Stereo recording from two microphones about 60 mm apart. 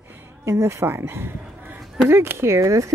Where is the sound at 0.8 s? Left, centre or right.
Right.